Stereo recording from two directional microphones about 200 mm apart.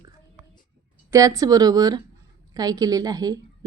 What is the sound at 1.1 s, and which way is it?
Speech, 15° right (ahead or behind).